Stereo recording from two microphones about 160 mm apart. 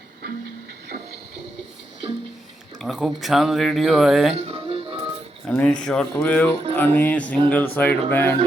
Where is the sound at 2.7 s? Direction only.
Centre (ahead or behind).